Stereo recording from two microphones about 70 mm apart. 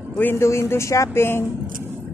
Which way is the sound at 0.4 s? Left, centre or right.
Left.